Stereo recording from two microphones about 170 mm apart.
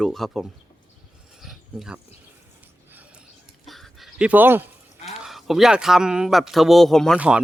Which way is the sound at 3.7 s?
Centre (ahead or behind).